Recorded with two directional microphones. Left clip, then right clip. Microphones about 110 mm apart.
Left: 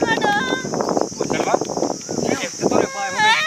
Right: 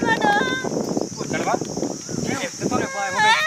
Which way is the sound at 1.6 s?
60° left (ahead or behind).